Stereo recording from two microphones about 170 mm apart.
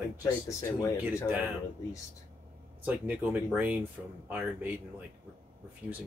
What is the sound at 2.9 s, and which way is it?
Speech, 10° right (ahead or behind).